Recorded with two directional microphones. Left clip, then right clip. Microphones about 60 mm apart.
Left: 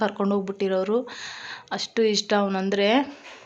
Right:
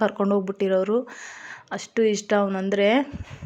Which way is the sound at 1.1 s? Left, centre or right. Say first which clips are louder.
Left 2 dB; right.